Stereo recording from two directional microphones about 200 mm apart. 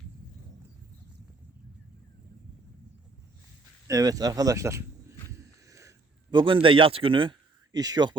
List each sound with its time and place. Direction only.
3.8 s speech: 15° right (ahead or behind)
6.3 s speech: 25° right (ahead or behind)